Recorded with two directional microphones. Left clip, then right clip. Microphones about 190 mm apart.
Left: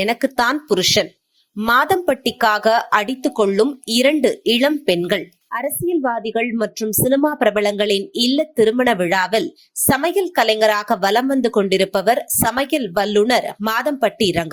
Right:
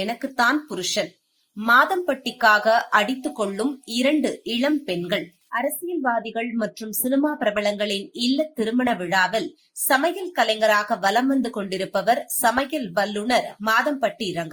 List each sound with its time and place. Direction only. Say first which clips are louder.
0.0 s speech: left 4 dB; 45° left (ahead or behind)